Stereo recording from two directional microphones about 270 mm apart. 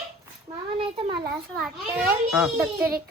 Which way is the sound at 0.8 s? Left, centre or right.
Centre.